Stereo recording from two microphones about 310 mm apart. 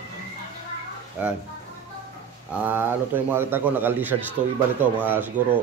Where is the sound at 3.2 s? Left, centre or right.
Centre.